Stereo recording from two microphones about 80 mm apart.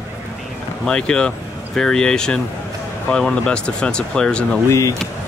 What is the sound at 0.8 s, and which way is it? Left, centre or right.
Speech, centre.